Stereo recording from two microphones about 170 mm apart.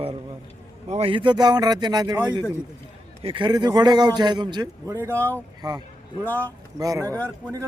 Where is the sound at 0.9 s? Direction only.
35° right (ahead or behind).